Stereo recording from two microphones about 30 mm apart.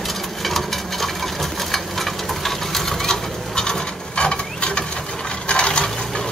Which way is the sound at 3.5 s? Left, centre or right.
Left.